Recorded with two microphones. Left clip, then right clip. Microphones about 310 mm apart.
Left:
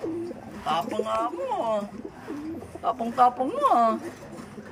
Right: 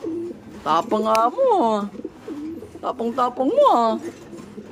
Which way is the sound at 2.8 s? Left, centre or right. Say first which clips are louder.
Left 1 dB; centre.